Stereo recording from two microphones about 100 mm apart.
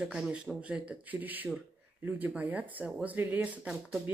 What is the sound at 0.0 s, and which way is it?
Speech, 10° right (ahead or behind).